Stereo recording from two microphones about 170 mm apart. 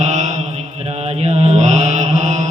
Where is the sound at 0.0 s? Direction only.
45° right (ahead or behind).